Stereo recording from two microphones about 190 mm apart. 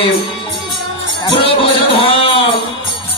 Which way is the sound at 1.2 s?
30° left (ahead or behind).